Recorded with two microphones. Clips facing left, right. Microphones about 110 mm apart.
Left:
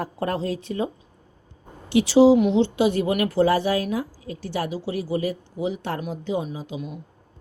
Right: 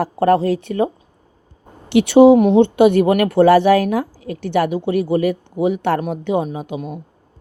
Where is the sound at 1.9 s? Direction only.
65° right (ahead or behind).